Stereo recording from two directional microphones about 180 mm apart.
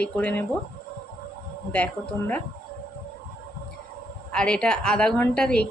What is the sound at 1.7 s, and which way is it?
Speech, 10° left (ahead or behind).